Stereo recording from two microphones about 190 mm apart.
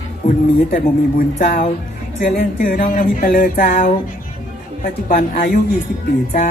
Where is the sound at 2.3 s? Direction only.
45° left (ahead or behind).